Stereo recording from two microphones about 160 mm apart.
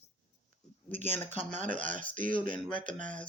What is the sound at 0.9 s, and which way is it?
Speech, 45° right (ahead or behind).